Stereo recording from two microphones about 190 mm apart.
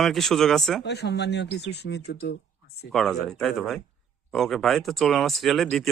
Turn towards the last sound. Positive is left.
turn(degrees=0)  # may be behind; listen again after turning